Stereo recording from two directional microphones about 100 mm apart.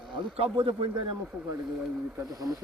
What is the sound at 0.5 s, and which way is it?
Speech, 55° right (ahead or behind).